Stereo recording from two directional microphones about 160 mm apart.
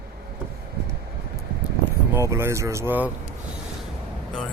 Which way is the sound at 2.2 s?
15° right (ahead or behind).